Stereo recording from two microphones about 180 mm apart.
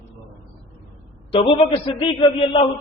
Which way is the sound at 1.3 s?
30° left (ahead or behind).